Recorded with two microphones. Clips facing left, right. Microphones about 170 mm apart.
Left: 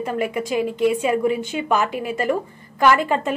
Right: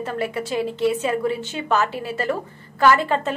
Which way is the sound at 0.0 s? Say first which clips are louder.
Left 2 dB; 15° left (ahead or behind).